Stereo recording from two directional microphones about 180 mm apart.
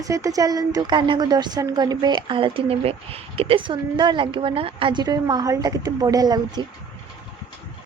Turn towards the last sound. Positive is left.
turn(degrees=-20)  # may be behind; listen again after turning